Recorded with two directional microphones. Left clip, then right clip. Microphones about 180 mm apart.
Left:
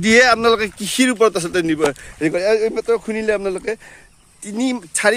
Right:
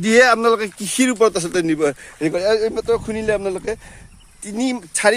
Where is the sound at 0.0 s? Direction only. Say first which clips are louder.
Left 1 dB; 20° left (ahead or behind).